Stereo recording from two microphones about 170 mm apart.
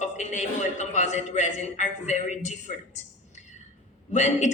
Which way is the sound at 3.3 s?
45° left (ahead or behind).